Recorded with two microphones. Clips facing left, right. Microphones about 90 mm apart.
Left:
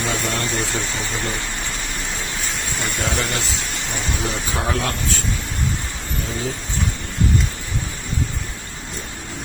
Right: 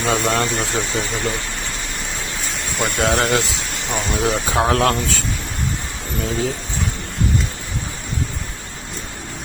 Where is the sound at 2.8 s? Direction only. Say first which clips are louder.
Right 7 dB; 85° right.